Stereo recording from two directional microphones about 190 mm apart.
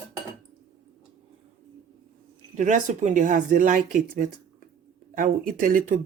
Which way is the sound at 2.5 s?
40° right (ahead or behind).